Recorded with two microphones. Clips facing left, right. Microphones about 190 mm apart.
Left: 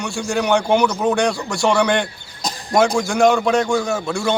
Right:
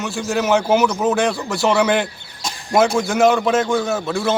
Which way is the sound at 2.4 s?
35° left (ahead or behind).